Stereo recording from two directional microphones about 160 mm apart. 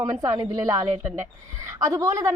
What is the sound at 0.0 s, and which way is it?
A woman's voice, 20° right (ahead or behind).